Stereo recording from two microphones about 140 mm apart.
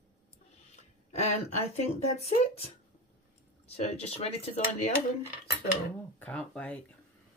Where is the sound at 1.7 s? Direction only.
50° left (ahead or behind).